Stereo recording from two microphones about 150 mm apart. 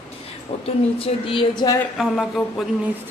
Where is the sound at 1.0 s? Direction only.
35° left (ahead or behind).